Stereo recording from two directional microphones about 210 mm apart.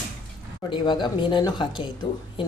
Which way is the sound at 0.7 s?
20° left (ahead or behind).